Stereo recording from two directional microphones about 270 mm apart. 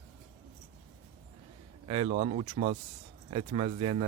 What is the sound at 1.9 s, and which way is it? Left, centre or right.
Speech, right.